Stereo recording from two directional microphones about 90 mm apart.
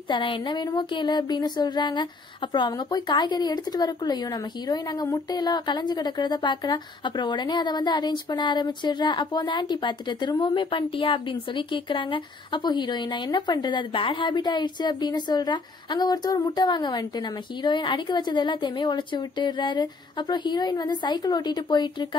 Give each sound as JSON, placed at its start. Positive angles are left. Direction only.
{"t": 0.1, "sound": "speech", "side_deg": 70}
{"t": 0.4, "sound": "a woman's voice", "side_deg": 55}